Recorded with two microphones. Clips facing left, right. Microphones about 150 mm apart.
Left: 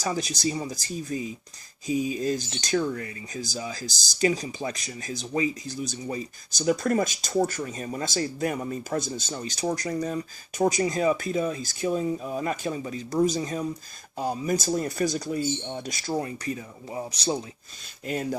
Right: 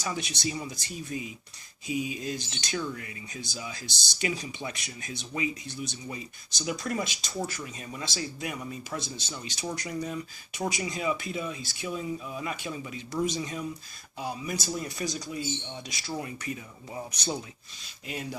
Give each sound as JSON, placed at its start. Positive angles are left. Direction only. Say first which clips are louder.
{"t": 0.0, "sound": "speech", "louder": "left 5 dB", "side_deg": 35}
{"t": 16.1, "sound": "speech", "louder": "left 5 dB", "side_deg": 35}
{"t": 18.0, "sound": "speech", "louder": "left 8 dB", "side_deg": 45}